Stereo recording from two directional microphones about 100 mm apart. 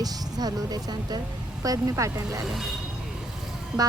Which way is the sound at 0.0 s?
40° right (ahead or behind).